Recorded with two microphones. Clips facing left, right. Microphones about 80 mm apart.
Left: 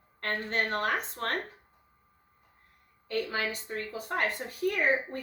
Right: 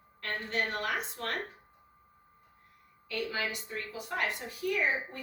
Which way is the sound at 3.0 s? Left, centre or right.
Left.